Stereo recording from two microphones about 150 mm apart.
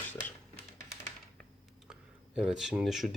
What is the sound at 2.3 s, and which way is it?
Speech, centre (ahead or behind).